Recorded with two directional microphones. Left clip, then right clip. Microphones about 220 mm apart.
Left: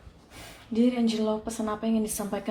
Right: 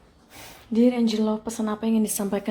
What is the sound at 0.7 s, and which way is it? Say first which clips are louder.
Speech: right 4 dB; 40° right (ahead or behind).